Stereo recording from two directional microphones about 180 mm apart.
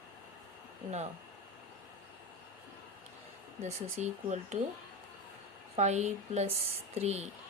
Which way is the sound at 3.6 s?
40° right (ahead or behind).